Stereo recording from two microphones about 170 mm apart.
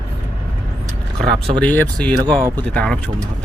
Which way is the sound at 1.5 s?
10° left (ahead or behind).